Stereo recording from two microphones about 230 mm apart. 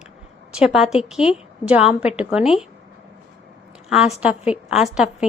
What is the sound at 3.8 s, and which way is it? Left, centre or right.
A woman's voice, centre.